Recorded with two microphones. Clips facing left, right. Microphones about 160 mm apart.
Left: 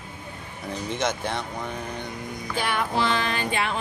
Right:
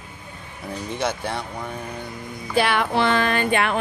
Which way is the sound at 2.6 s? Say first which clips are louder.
Right 6 dB; 80° right.